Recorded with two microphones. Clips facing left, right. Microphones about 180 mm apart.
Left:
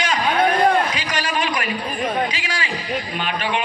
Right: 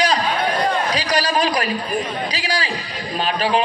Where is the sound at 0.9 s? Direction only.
35° right (ahead or behind).